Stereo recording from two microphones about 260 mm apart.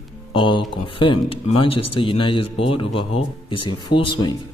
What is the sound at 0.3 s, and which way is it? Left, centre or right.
Speech, centre.